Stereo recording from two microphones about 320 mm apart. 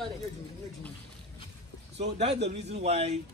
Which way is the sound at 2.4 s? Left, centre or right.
Centre.